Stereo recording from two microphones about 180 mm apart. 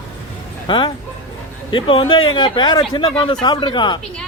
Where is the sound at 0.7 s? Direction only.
25° left (ahead or behind).